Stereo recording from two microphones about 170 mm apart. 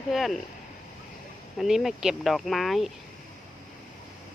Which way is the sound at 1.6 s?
Centre (ahead or behind).